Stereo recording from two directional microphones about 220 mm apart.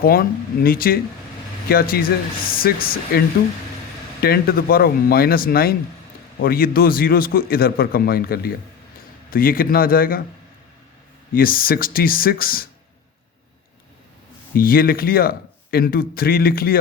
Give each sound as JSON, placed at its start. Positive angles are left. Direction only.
{"t": 0.0, "sound": "speech", "side_deg": 40}
{"t": 11.3, "sound": "speech", "side_deg": 40}
{"t": 14.5, "sound": "speech", "side_deg": 40}